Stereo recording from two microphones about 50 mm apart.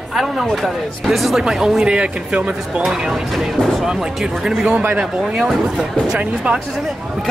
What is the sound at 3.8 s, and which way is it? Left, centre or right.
Speech, centre.